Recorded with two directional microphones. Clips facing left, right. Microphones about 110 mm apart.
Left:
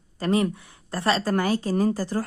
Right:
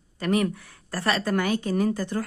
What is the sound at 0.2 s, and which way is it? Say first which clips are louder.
A woman's voice: left 1 dB; 30° left (ahead or behind).